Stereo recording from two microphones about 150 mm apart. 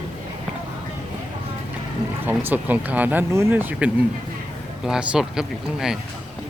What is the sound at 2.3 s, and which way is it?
Speech, 10° right (ahead or behind).